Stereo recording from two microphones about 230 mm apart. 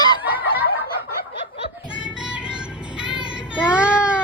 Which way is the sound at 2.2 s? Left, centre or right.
Centre.